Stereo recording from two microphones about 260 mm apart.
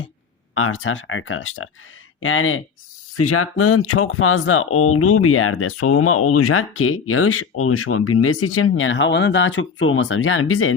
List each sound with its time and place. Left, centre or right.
0.5 s speech: left